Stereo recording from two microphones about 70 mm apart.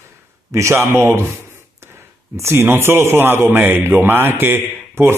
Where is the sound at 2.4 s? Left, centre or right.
Right.